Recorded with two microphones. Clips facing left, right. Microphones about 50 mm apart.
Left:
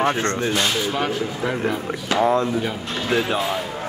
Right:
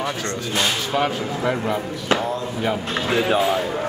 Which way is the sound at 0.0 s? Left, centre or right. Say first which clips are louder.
Left 5 dB; left.